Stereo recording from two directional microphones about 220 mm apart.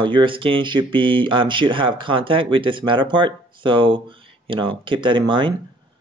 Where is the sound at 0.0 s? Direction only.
20° right (ahead or behind).